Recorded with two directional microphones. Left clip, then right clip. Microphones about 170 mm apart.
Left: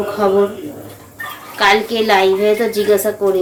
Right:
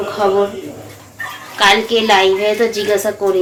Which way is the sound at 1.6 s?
5° left (ahead or behind).